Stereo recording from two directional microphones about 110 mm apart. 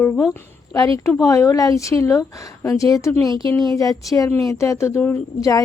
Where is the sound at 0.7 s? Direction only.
30° left (ahead or behind).